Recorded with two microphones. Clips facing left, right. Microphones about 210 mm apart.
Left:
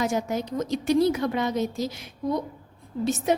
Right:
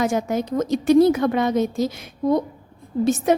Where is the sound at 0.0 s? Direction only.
50° right (ahead or behind).